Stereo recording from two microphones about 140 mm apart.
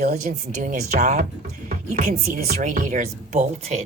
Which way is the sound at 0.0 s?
60° right (ahead or behind).